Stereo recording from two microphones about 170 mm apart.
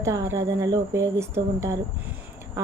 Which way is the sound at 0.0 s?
20° right (ahead or behind).